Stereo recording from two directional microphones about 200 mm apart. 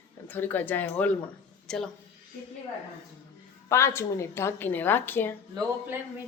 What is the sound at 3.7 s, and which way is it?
A woman's voice, 15° left (ahead or behind).